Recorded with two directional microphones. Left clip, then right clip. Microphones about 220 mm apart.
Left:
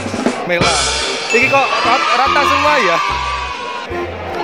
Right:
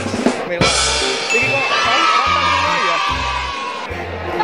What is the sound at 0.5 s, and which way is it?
Speech, centre (ahead or behind).